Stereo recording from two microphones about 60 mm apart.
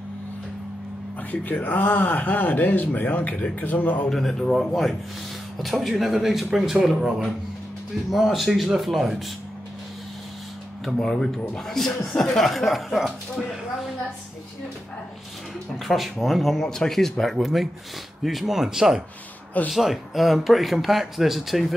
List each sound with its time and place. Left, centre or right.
1.3 s speech: left
4.1 s speech: centre
10.9 s speech: centre
15.8 s speech: centre